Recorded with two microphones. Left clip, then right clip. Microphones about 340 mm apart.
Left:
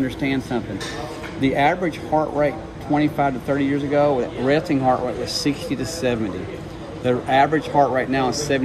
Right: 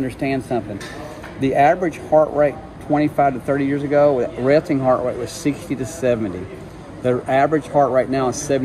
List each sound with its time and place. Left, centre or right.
0.2 s speech: centre